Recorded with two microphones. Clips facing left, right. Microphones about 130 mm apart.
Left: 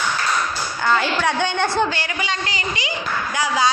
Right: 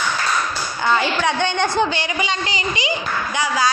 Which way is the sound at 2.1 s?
20° right (ahead or behind).